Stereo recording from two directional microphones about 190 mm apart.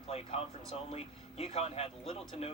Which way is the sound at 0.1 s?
30° left (ahead or behind).